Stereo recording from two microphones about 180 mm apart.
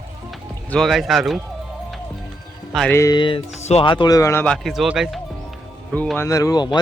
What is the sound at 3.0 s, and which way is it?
Speech, 20° left (ahead or behind).